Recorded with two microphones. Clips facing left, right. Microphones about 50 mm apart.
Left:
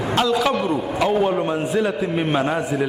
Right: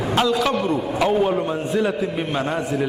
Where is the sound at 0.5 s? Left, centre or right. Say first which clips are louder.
Even; centre.